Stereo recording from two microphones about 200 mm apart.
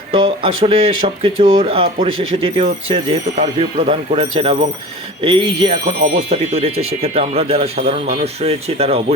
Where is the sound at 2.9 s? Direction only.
30° right (ahead or behind).